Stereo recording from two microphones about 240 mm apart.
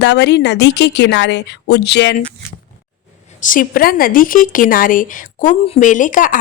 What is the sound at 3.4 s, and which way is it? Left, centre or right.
Speech, left.